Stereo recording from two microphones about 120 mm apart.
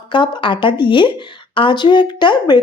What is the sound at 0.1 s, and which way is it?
Speech, 40° left (ahead or behind).